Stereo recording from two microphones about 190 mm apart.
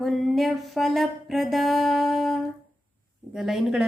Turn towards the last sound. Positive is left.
turn(degrees=0)  # may be behind; listen again after turning